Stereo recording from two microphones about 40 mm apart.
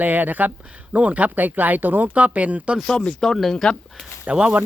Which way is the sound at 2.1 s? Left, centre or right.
Right.